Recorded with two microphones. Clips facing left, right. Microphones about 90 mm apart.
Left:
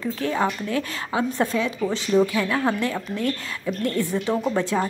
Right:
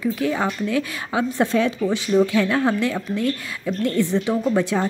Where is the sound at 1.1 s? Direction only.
20° right (ahead or behind).